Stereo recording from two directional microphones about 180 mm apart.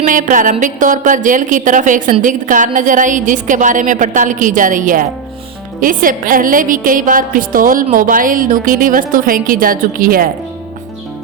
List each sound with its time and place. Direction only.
0.0 s a woman's voice: 45° right (ahead or behind)